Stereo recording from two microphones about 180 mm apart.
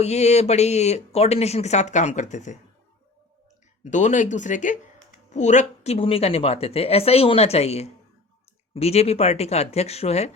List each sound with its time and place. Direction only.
0.0 s speech: 35° left (ahead or behind)
3.8 s speech: 40° left (ahead or behind)